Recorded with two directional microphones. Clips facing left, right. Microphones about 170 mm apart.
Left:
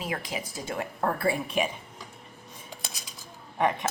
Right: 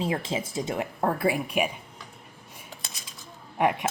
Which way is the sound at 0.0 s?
25° right (ahead or behind).